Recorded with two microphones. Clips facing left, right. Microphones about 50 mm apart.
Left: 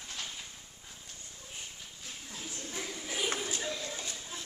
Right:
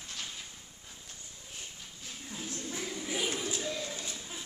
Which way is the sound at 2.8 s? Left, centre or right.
Centre.